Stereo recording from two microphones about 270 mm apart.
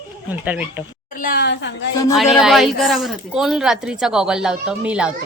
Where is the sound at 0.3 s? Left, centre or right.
Centre.